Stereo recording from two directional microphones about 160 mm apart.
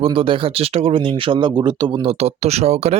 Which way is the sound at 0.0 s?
35° right (ahead or behind).